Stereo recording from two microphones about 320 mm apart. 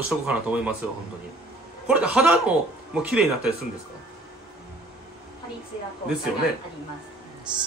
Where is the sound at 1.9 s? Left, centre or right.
Centre.